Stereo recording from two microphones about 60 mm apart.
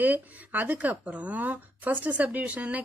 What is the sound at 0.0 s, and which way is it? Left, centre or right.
Speech, right.